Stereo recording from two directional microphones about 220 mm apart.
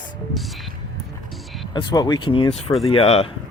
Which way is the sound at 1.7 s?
20° left (ahead or behind).